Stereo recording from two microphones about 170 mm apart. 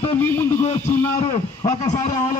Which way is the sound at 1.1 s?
25° left (ahead or behind).